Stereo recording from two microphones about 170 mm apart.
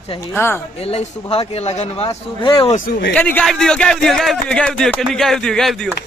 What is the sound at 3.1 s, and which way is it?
A man's voice, 10° left (ahead or behind).